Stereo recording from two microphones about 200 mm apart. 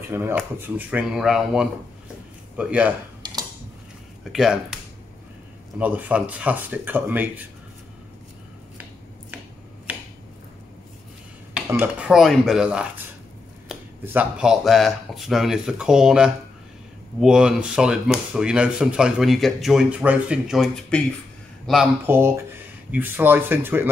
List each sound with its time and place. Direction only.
0.1 s speech: 10° right (ahead or behind)
3.2 s a sound: 20° right (ahead or behind)
4.2 s speech: centre (ahead or behind)
5.8 s speech: 10° right (ahead or behind)
11.5 s speech: 5° right (ahead or behind)